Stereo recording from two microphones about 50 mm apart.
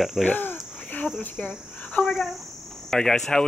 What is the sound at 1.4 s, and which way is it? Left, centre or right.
Cricket, left.